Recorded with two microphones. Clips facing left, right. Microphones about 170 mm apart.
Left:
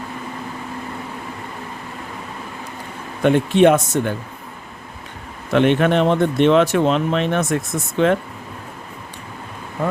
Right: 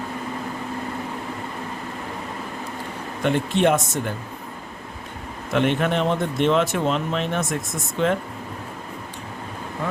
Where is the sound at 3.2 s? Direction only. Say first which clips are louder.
Left 6 dB; 60° left (ahead or behind).